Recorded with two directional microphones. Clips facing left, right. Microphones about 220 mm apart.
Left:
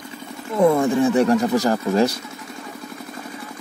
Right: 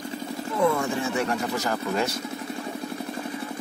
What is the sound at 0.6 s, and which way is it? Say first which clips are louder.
Speech: left 8 dB; 35° left (ahead or behind).